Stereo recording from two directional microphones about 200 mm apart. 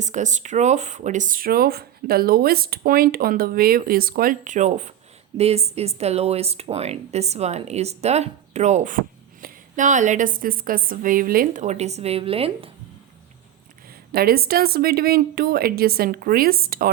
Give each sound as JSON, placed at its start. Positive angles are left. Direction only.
{"t": 0.0, "sound": "speech", "side_deg": -35}
{"t": 14.1, "sound": "speech", "side_deg": -50}